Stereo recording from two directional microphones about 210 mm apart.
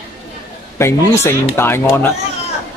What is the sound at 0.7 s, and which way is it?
A man's voice, 15° left (ahead or behind).